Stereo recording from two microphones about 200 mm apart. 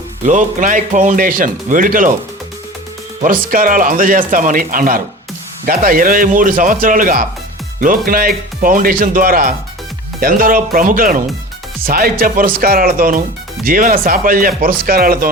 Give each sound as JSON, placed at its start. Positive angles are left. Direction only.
{"t": 0.3, "sound": "speech", "side_deg": -40}
{"t": 3.2, "sound": "speech", "side_deg": -45}